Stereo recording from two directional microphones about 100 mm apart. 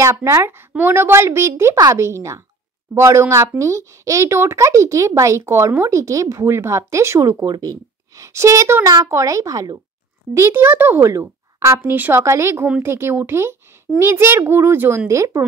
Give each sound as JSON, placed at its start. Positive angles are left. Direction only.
{"t": 0.0, "sound": "a child's voice", "side_deg": -30}
{"t": 10.3, "sound": "a child's voice", "side_deg": -25}
{"t": 11.8, "sound": "a child's voice", "side_deg": -20}